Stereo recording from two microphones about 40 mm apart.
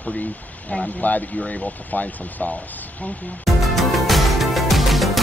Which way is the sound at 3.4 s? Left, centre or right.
Centre.